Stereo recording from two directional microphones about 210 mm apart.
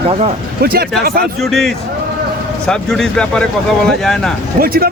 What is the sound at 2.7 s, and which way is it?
Speech, centre (ahead or behind).